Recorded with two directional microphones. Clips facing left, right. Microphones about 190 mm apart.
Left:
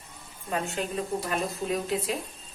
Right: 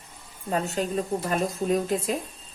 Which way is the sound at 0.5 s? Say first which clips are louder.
Right 4 dB; 40° right (ahead or behind).